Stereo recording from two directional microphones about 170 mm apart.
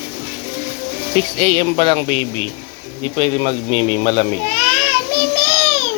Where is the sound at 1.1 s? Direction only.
35° right (ahead or behind).